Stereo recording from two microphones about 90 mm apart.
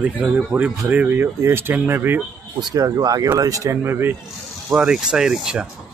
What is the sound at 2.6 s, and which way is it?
Speech, 50° right (ahead or behind).